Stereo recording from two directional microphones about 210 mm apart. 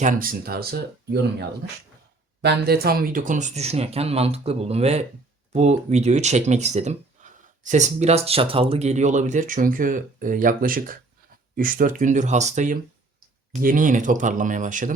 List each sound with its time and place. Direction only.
0.0 s speech: 40° right (ahead or behind)